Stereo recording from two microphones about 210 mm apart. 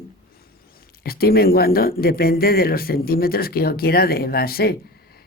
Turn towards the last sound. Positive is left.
turn(degrees=45)  # may be behind; listen again after turning